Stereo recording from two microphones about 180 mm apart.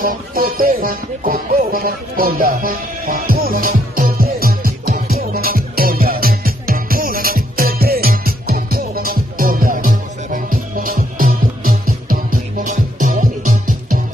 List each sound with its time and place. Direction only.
0.0 s music: 50° right (ahead or behind)